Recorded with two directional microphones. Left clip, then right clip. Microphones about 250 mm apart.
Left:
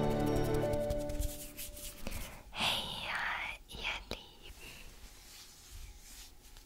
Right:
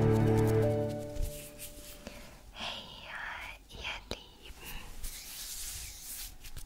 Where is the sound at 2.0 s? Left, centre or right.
Centre.